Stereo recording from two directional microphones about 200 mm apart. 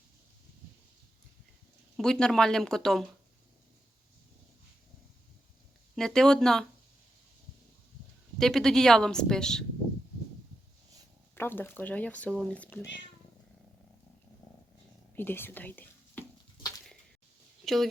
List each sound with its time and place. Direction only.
2.0 s a woman's voice: 5° left (ahead or behind)
6.0 s a woman's voice: 5° left (ahead or behind)
8.4 s a woman's voice: centre (ahead or behind)
11.3 s speech: 10° left (ahead or behind)
15.1 s whispering: 10° left (ahead or behind)